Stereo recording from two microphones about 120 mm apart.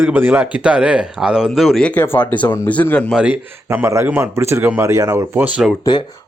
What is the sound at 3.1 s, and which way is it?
Speech, 15° right (ahead or behind).